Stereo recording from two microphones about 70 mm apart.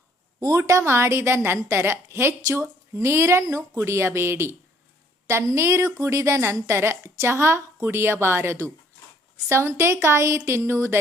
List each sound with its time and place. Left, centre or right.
0.3 s a woman's voice: right